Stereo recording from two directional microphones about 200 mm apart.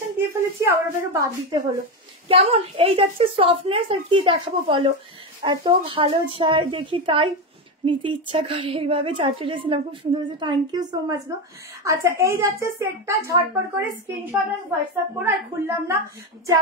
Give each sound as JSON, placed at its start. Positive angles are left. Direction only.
{"t": 0.2, "sound": "a woman's voice", "side_deg": -10}
{"t": 2.2, "sound": "a woman's voice", "side_deg": -30}